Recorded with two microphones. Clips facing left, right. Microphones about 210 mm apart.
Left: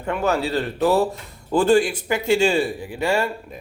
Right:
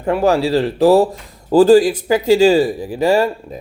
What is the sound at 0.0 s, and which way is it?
Speech, 35° right (ahead or behind).